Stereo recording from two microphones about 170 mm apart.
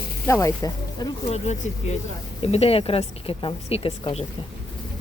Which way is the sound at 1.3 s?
40° left (ahead or behind).